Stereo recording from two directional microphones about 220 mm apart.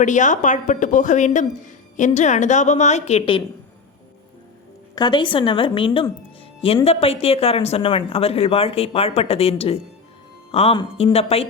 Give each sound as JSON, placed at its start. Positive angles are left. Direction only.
{"t": 0.0, "sound": "a woman's voice", "side_deg": 35}
{"t": 4.9, "sound": "a woman's voice", "side_deg": 20}